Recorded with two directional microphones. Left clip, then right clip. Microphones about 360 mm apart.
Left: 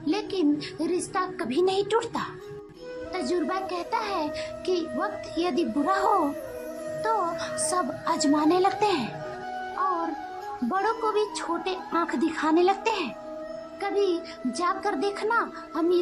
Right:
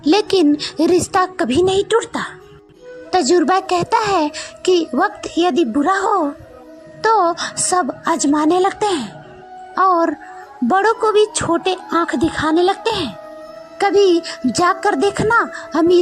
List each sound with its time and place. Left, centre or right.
0.0 s a child's voice: right
10.7 s a woman's voice: centre